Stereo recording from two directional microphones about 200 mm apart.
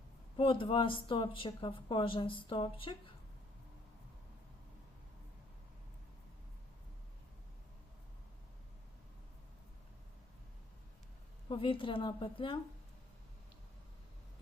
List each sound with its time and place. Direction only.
0.3 s speech: 25° left (ahead or behind)
11.4 s speech: 25° left (ahead or behind)